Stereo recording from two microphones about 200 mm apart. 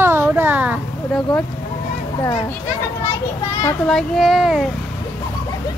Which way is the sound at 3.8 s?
Centre (ahead or behind).